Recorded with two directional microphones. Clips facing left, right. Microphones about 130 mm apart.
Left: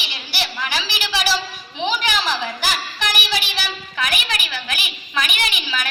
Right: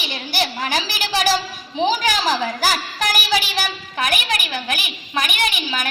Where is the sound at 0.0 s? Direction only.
45° right (ahead or behind).